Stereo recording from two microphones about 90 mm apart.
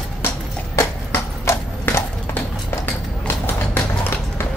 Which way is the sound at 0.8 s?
30° left (ahead or behind).